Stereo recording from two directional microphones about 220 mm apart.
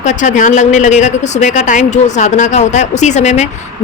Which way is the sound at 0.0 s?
35° left (ahead or behind).